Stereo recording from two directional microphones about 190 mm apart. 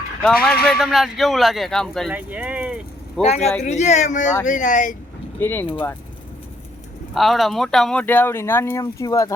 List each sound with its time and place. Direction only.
0.2 s speech: centre (ahead or behind)
3.2 s speech: 35° left (ahead or behind)
5.4 s speech: 10° left (ahead or behind)
7.1 s speech: centre (ahead or behind); by 9.3 s 20° left (ahead or behind)